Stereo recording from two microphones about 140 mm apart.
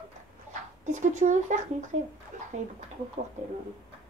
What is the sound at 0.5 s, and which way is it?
Speech, 60° right (ahead or behind).